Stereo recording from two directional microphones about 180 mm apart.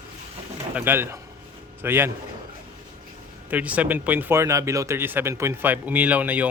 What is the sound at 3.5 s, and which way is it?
Speech, 10° right (ahead or behind).